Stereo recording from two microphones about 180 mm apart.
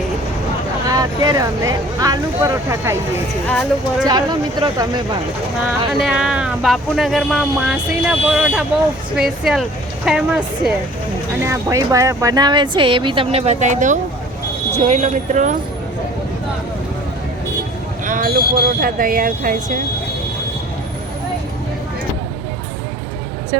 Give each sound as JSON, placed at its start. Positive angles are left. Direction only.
{"t": 0.9, "sound": "speech", "side_deg": -20}
{"t": 3.4, "sound": "speech", "side_deg": 5}
{"t": 4.0, "sound": "speech", "side_deg": -25}
{"t": 6.0, "sound": "speech", "side_deg": -5}
{"t": 11.4, "sound": "speech", "side_deg": -15}
{"t": 18.0, "sound": "speech", "side_deg": -50}